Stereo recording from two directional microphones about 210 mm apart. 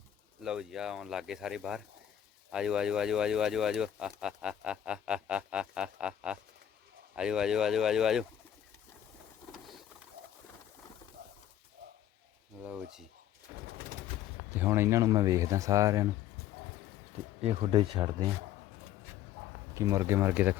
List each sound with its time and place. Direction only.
0.4 s speech: 5° right (ahead or behind)
12.6 s speech: 5° right (ahead or behind)
14.5 s speech: 10° right (ahead or behind)
17.4 s speech: 25° right (ahead or behind)
19.7 s speech: 15° right (ahead or behind)